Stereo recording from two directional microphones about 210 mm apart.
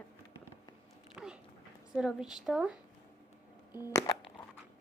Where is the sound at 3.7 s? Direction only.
15° left (ahead or behind).